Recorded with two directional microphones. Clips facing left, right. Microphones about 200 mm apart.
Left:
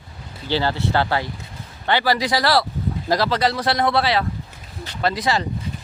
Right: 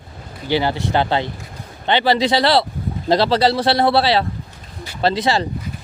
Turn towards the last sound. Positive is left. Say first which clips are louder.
# right 4 dB
turn(degrees=-30)  # may be behind; listen again after turning